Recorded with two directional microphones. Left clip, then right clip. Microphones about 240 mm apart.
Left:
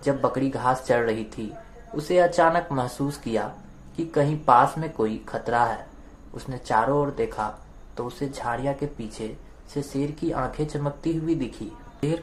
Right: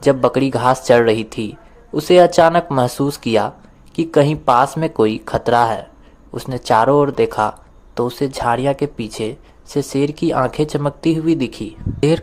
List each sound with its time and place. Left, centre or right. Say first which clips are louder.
0.0 s speech: right 10 dB; right